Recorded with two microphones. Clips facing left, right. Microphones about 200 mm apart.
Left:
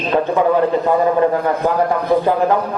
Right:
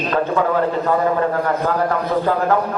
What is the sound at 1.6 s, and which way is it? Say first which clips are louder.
Speech: left 3 dB; 15° left (ahead or behind).